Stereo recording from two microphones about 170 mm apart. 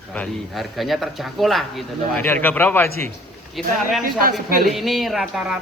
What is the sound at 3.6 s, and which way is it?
Speech, centre (ahead or behind).